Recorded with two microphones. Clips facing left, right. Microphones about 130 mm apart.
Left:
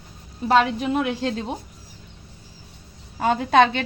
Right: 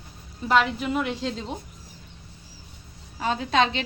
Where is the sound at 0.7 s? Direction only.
55° left (ahead or behind).